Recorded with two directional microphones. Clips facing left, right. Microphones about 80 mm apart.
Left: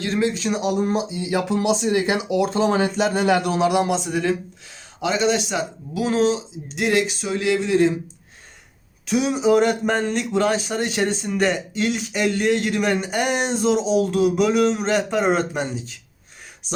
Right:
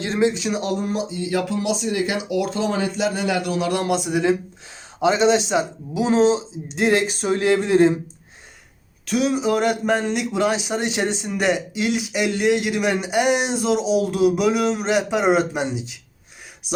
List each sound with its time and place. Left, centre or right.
0.0 s speech: right
0.6 s speech: centre
0.9 s a sound: centre
1.5 s speech: left
3.8 s a man's voice: centre
4.9 s speech: right
7.2 s a sound: right
9.0 s a man's voice: centre